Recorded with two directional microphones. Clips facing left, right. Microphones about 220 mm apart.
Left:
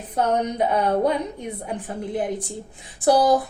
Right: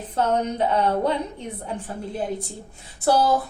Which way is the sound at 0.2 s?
15° left (ahead or behind).